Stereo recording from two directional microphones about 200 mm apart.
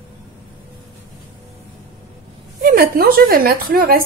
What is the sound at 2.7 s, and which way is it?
A woman's voice, 50° right (ahead or behind).